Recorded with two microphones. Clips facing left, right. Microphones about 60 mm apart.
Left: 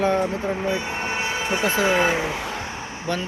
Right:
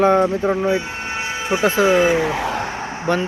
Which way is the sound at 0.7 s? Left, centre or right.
Centre.